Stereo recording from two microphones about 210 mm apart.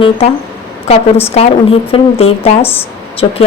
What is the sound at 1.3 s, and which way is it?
A woman's voice, 30° left (ahead or behind).